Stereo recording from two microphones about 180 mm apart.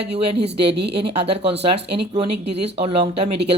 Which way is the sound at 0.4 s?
35° right (ahead or behind).